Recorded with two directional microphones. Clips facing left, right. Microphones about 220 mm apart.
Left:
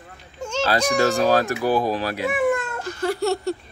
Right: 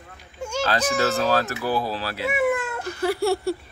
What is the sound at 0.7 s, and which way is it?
Speech, 10° left (ahead or behind).